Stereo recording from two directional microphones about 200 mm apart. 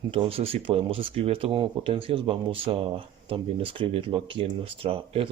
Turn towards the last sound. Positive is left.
turn(degrees=-25)  # may be behind; listen again after turning